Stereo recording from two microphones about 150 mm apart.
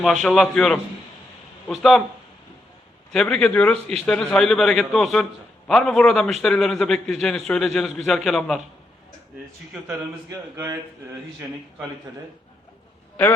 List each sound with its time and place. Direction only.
0.0 s a man's voice: centre (ahead or behind)
3.1 s a man's voice: 5° left (ahead or behind)
10.2 s speech: 20° right (ahead or behind)